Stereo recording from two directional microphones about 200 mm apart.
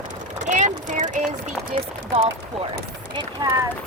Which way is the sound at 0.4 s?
40° right (ahead or behind).